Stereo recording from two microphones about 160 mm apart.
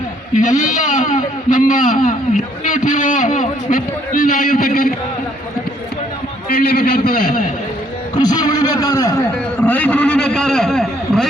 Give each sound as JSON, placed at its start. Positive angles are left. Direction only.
{"t": 0.3, "sound": "a man's voice", "side_deg": 55}
{"t": 6.5, "sound": "a man's voice", "side_deg": 65}
{"t": 8.1, "sound": "a man's voice", "side_deg": 25}
{"t": 9.6, "sound": "a man's voice", "side_deg": 10}